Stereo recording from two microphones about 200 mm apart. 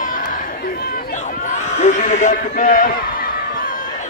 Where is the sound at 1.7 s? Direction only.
35° left (ahead or behind).